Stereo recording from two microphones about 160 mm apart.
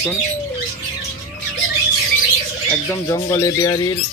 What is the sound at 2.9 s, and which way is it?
Speech, 20° left (ahead or behind).